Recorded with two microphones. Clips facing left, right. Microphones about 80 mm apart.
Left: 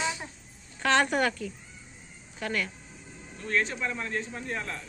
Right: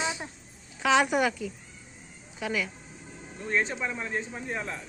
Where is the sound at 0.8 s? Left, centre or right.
Centre.